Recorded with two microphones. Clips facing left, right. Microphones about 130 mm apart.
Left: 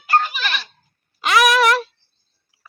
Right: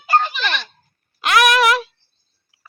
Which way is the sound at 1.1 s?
Centre (ahead or behind).